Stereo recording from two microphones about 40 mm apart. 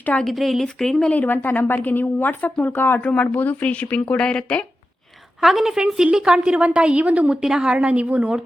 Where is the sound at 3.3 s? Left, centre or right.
Left.